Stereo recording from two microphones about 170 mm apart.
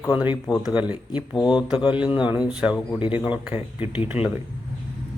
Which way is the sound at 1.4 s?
25° left (ahead or behind).